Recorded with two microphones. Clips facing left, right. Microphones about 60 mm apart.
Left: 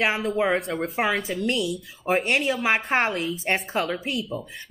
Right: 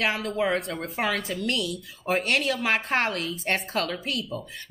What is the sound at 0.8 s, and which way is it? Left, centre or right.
Speech, centre.